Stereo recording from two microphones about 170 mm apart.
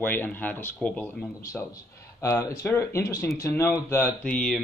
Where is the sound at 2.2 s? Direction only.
20° left (ahead or behind).